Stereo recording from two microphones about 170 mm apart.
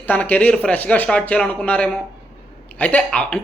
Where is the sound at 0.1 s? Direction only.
10° left (ahead or behind).